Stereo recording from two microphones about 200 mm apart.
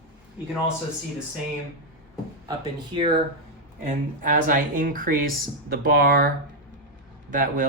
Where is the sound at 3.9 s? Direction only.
40° right (ahead or behind).